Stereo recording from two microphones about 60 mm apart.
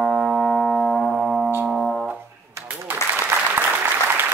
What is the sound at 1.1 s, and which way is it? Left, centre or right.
Music, centre.